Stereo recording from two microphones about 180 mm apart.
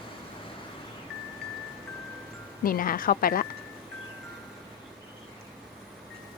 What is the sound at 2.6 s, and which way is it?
Speech, 50° left (ahead or behind).